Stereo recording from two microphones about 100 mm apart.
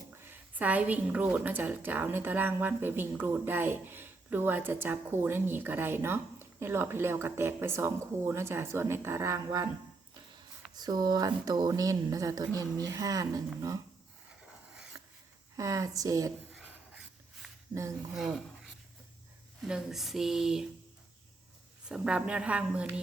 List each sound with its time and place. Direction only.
0.2 s a woman's voice: 20° right (ahead or behind); by 9.6 s 35° right (ahead or behind)
10.8 s speech: 45° right (ahead or behind)
14.9 s a sound: 35° right (ahead or behind)
15.5 s speech: 35° right (ahead or behind)
17.4 s a sound: 5° right (ahead or behind)
18.1 s speech: centre (ahead or behind)
21.8 s a woman's voice: 10° right (ahead or behind)